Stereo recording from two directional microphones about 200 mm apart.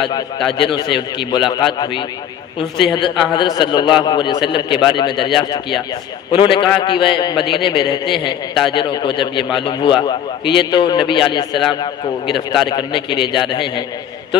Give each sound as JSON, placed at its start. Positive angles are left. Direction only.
{"t": 0.5, "sound": "a man's voice", "side_deg": 25}
{"t": 6.3, "sound": "a man's voice", "side_deg": 25}
{"t": 12.6, "sound": "a man's voice", "side_deg": 25}